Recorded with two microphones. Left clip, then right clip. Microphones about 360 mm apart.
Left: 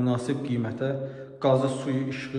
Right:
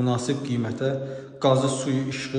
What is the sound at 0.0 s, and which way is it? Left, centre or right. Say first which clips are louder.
A man's voice: right 2 dB; centre.